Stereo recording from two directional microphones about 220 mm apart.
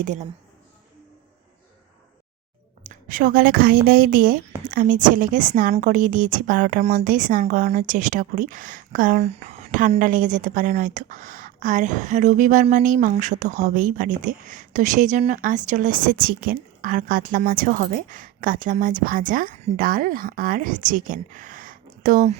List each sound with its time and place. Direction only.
0.0 s a woman's voice: 35° right (ahead or behind)
2.8 s a woman's voice: 35° right (ahead or behind)